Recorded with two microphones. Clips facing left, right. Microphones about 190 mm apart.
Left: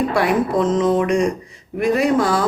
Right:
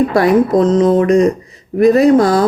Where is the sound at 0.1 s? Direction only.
40° right (ahead or behind).